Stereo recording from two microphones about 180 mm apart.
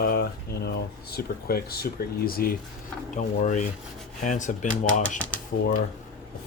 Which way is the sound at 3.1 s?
45° left (ahead or behind).